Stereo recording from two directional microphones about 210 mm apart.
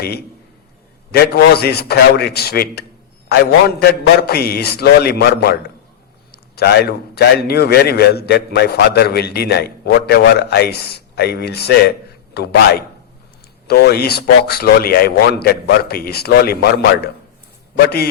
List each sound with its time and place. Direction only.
1.1 s a man's voice: 45° left (ahead or behind)